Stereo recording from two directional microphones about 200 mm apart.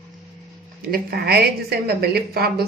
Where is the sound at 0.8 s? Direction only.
50° right (ahead or behind).